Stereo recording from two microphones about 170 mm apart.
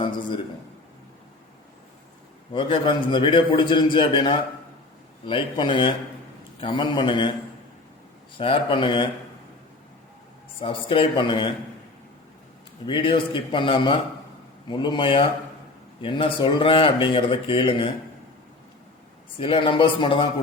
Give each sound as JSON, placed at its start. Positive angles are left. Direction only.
{"t": 2.5, "sound": "a man's voice", "side_deg": 30}
{"t": 8.4, "sound": "a man's voice", "side_deg": 30}
{"t": 10.6, "sound": "a man's voice", "side_deg": 30}
{"t": 12.8, "sound": "a man's voice", "side_deg": 30}
{"t": 19.4, "sound": "speech", "side_deg": 30}